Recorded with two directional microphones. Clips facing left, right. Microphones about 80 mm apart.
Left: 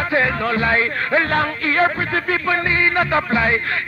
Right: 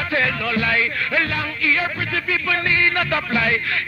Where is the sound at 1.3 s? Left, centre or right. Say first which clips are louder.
Left 4 dB; left.